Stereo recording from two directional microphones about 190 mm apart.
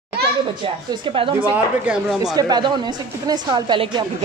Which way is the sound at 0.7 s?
25° right (ahead or behind).